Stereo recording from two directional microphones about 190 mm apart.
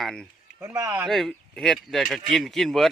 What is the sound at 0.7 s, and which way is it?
Speech, 15° right (ahead or behind).